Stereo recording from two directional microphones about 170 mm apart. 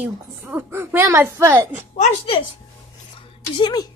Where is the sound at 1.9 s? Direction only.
40° left (ahead or behind).